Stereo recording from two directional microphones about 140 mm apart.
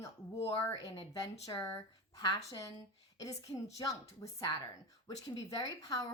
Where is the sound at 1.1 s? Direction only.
25° left (ahead or behind).